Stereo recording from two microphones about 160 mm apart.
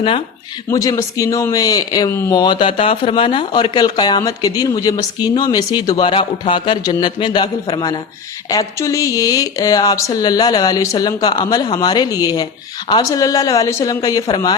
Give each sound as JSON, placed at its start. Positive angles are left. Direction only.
{"t": 0.7, "sound": "speech", "side_deg": 20}